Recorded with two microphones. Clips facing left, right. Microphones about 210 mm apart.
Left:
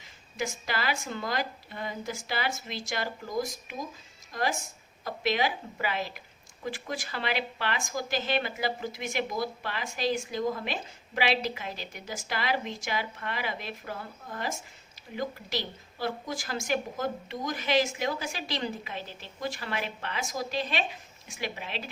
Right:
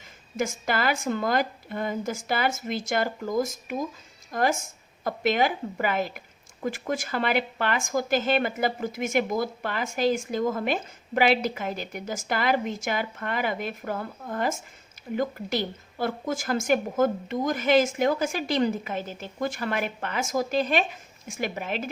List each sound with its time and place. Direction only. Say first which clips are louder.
0.3 s a woman's voice: right 6 dB; 50° right (ahead or behind)